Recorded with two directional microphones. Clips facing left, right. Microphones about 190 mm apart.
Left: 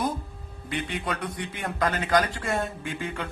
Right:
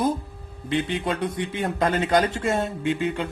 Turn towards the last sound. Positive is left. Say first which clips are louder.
# right 8 dB
turn(degrees=-25)  # may be behind; listen again after turning